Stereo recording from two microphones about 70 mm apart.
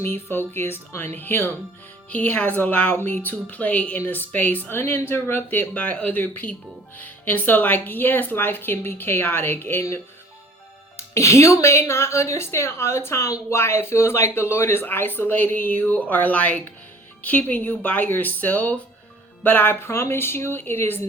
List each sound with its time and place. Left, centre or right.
0.0 s a woman's voice: left
10.9 s a woman's voice: left